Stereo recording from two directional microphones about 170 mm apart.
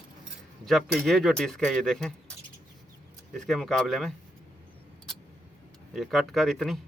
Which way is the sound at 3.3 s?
Centre (ahead or behind).